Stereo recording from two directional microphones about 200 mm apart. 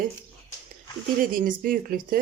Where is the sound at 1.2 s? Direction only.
45° right (ahead or behind).